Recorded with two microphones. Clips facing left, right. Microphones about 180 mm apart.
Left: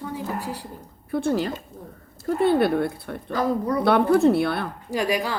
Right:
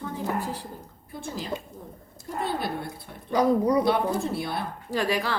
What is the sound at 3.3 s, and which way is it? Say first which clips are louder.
Speech: right 2 dB; 15° right (ahead or behind).